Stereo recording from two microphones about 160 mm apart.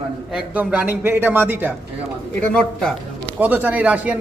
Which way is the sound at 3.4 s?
10° right (ahead or behind).